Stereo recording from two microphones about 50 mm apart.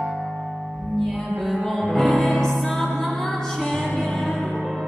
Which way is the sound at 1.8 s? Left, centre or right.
Centre.